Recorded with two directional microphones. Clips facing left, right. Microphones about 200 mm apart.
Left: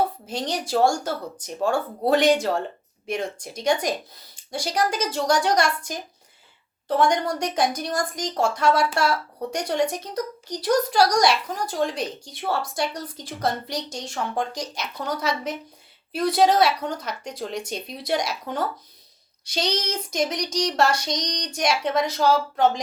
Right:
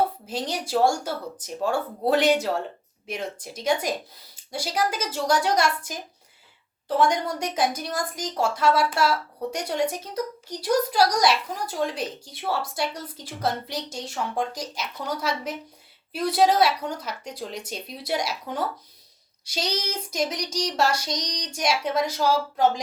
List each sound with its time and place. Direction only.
0.3 s a woman's voice: 5° right (ahead or behind)